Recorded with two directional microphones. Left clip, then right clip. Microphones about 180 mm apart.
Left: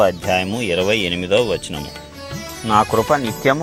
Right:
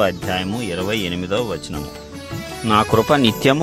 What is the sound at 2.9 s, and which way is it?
Speech, 40° right (ahead or behind).